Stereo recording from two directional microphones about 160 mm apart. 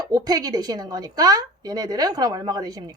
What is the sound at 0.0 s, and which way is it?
Speech, 25° right (ahead or behind).